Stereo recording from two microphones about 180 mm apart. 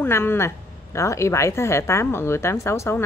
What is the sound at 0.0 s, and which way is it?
Speech, 15° left (ahead or behind).